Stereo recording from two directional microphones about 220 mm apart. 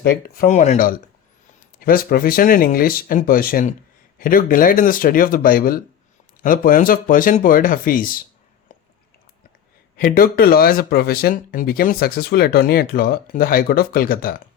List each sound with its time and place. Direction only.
0.0 s speech: 45° left (ahead or behind)
10.0 s speech: 40° left (ahead or behind)